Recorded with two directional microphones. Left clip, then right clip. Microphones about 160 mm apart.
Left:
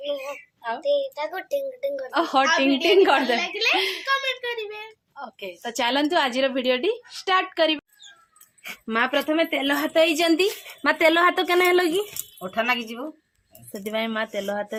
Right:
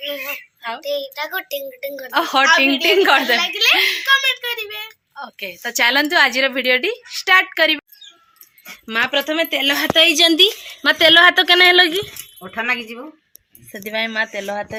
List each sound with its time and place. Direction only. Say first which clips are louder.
0.3 s a child's voice: right 4 dB; centre (ahead or behind)
2.0 s a woman's voice: right 7 dB; 10° right (ahead or behind)
3.3 s a woman's voice: right 7 dB; 5° left (ahead or behind)
3.8 s a child's voice: right 8 dB; 10° right (ahead or behind)
4.0 s a sound: right 8 dB; 5° left (ahead or behind)
5.1 s a woman's voice: right 5 dB; 5° right (ahead or behind)
8.9 s speech: right 4 dB; 15° left (ahead or behind)
9.5 s a woman's voice: right 6 dB; 15° right (ahead or behind)
10.2 s a woman's voice: right 8 dB; 35° right (ahead or behind)
10.8 s a woman's voice: right 8 dB; 5° left (ahead or behind)
12.4 s speech: right 2 dB; 25° left (ahead or behind)
13.7 s a woman's voice: right 5 dB; centre (ahead or behind)